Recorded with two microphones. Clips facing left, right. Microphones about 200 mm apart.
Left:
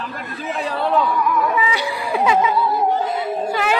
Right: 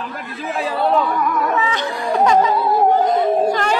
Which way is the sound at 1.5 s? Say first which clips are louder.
Right 1 dB; 10° left (ahead or behind).